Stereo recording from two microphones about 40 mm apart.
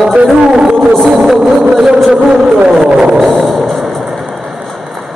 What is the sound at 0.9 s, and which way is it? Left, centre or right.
Music, centre.